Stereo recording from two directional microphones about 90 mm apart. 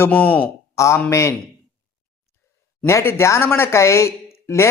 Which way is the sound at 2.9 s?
30° left (ahead or behind).